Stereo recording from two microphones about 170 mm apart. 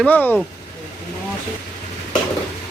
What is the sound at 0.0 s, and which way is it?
Speech, 10° left (ahead or behind).